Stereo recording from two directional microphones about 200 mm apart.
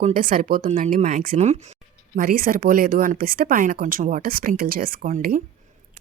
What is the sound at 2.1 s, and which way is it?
Speech, 45° right (ahead or behind).